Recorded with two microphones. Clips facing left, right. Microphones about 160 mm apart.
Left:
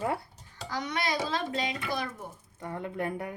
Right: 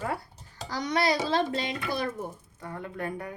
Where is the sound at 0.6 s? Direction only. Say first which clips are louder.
Right 5 dB; 35° right (ahead or behind).